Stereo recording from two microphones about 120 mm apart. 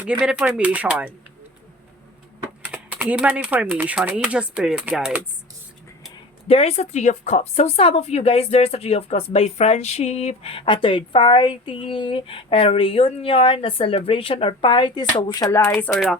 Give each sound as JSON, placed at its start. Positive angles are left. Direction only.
{"t": 0.0, "sound": "speech", "side_deg": -10}
{"t": 2.7, "sound": "speech", "side_deg": -15}
{"t": 6.5, "sound": "a woman's voice", "side_deg": 60}
{"t": 15.7, "sound": "speech", "side_deg": 5}